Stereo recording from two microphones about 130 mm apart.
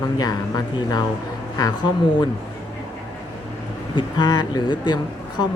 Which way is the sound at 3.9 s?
35° left (ahead or behind).